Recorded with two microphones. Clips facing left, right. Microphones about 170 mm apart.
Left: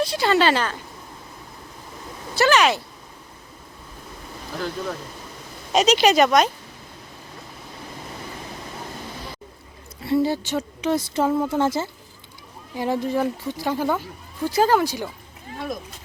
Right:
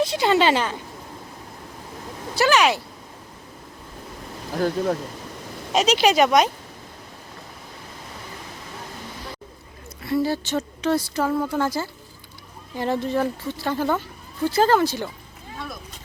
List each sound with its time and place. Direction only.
0.0 s speech: 20° right (ahead or behind)
2.3 s speech: 10° right (ahead or behind)
4.5 s speech: 45° right (ahead or behind)
5.7 s speech: 5° right (ahead or behind)
10.0 s speech: 25° left (ahead or behind)
12.7 s speech: 10° left (ahead or behind)